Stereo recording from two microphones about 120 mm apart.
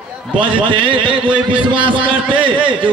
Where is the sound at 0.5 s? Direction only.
45° right (ahead or behind).